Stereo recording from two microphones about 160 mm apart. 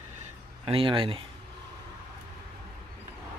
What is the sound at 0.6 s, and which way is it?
Speech, 35° right (ahead or behind).